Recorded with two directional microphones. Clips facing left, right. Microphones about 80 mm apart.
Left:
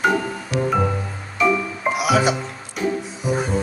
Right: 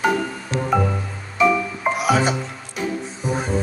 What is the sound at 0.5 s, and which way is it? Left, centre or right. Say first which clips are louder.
Music: left 3 dB; right.